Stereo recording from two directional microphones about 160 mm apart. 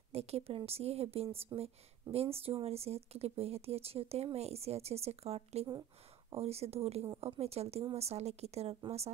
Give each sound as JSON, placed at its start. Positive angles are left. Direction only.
{"t": 0.1, "sound": "speech", "side_deg": -40}